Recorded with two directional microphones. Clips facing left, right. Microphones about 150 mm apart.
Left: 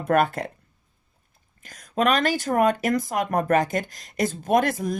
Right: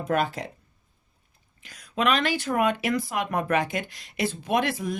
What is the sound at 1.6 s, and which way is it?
Speech, 45° left (ahead or behind).